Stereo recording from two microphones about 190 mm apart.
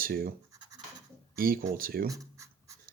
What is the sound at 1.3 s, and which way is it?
Speech, 50° right (ahead or behind).